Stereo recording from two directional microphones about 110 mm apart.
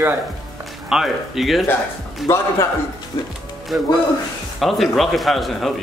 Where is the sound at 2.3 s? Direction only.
25° left (ahead or behind).